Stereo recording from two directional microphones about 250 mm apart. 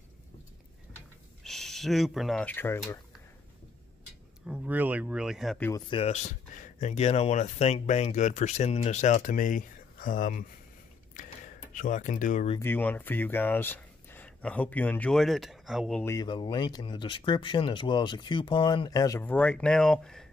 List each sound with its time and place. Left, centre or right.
1.4 s speech: centre
4.5 s speech: centre
5.7 s speech: centre; by 10.4 s left
11.1 s a sound: left
12.5 s speech: centre